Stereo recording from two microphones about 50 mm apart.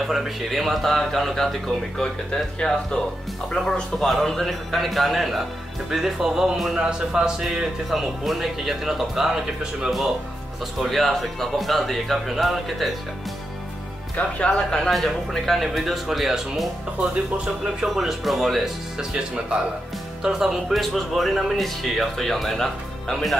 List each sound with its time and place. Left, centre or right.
0.0 s speech: centre
7.9 s speech: centre
10.8 s speech: centre
14.9 s speech: centre
18.9 s speech: centre